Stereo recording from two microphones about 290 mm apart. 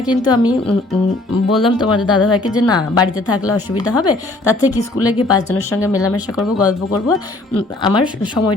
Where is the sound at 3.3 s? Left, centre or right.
Left.